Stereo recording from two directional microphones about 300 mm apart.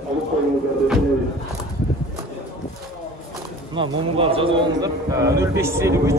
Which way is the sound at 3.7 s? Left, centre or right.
Centre.